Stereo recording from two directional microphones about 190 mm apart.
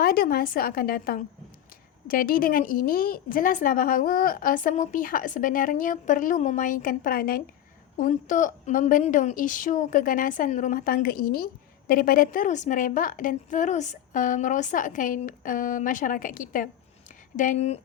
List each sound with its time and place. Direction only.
0.0 s a woman's voice: 50° left (ahead or behind)